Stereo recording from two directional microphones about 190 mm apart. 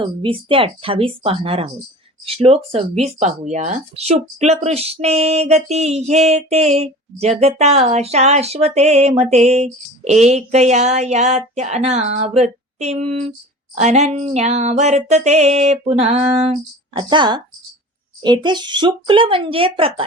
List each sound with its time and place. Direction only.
0.0 s speech: 25° right (ahead or behind)
2.2 s a sound: 30° right (ahead or behind)
18.2 s speech: 25° right (ahead or behind)